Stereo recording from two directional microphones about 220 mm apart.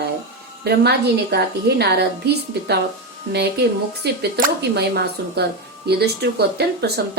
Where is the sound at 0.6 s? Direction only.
45° right (ahead or behind).